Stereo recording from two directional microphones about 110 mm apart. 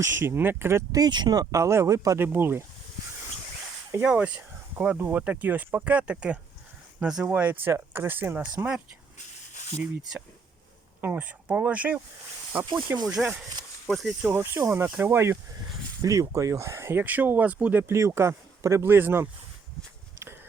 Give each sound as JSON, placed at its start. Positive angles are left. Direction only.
{"t": 0.0, "sound": "speech", "side_deg": -25}
{"t": 1.0, "sound": "speech", "side_deg": -40}
{"t": 2.2, "sound": "speech", "side_deg": -20}
{"t": 4.0, "sound": "speech", "side_deg": -10}
{"t": 9.6, "sound": "a sound", "side_deg": 75}
{"t": 11.0, "sound": "speech", "side_deg": -15}
{"t": 13.9, "sound": "speech", "side_deg": 0}
{"t": 14.2, "sound": "speech", "side_deg": -20}